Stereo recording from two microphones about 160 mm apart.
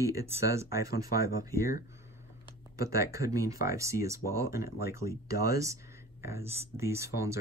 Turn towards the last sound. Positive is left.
turn(degrees=-20)  # may be behind; listen again after turning